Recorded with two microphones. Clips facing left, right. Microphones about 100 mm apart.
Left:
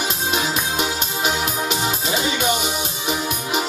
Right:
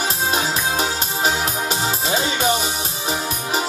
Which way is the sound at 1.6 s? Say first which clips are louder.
Even; 35° right (ahead or behind).